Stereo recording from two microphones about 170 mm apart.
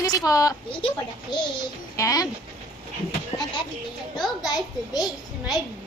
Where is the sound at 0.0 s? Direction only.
20° left (ahead or behind).